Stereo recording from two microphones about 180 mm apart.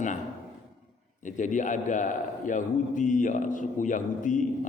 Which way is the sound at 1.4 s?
45° left (ahead or behind).